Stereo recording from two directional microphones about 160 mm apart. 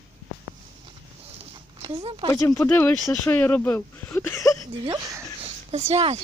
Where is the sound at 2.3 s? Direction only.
20° left (ahead or behind).